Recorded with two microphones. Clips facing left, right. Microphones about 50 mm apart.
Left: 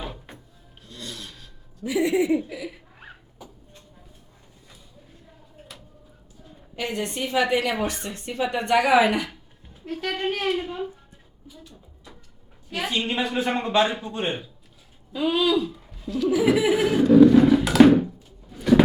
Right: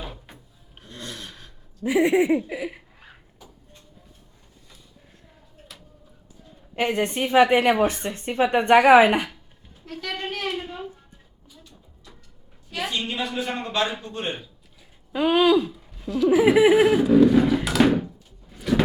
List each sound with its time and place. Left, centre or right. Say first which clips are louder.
0.0 s drawer open or close: left 2 dB; centre
0.8 s a sound: right 1 dB; right
2.5 s a woman's voice: right 4 dB; right
3.4 s a sound: left 4 dB; centre
6.7 s a woman's voice: right 5 dB; right
9.8 s a sound: left 4 dB; centre
13.1 s a man's voice: left 3 dB; left
13.6 s a man's voice: left 6 dB; centre
15.1 s a woman's voice: right 4 dB; right
16.0 s laughter: right 3 dB; centre
16.3 s a woman's voice: right 4 dB; right
16.7 s thunk: even; centre